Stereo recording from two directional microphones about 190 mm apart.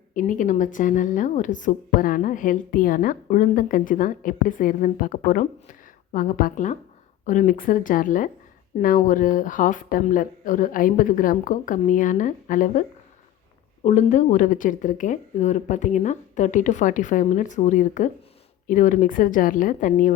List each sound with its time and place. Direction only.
0.1 s a woman's voice: 45° left (ahead or behind)
13.8 s a woman's voice: 40° left (ahead or behind)